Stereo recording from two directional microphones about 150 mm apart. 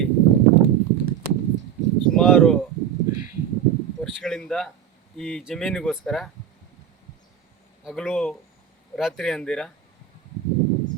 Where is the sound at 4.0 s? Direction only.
Centre (ahead or behind).